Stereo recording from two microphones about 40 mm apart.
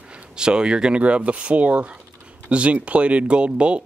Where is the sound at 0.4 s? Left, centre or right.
Right.